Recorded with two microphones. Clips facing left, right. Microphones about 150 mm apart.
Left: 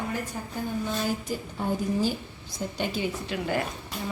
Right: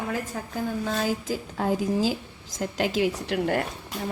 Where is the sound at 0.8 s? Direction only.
90° right.